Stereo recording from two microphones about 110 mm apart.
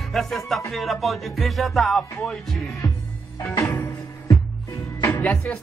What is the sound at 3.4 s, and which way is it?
Music, 25° left (ahead or behind).